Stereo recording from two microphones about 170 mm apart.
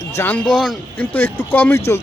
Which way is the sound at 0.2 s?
10° left (ahead or behind).